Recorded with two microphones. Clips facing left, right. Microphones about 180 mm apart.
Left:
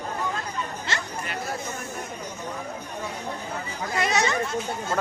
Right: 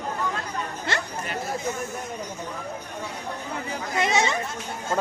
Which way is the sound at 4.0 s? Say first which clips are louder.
Right 1 dB; 25° right (ahead or behind).